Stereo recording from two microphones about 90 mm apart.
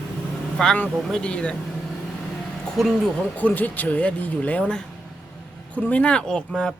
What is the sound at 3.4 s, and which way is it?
Speech, 20° left (ahead or behind).